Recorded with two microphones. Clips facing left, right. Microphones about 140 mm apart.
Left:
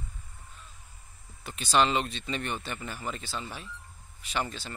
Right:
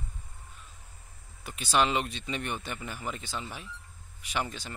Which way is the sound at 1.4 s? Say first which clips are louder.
Left 2 dB; 10° right (ahead or behind).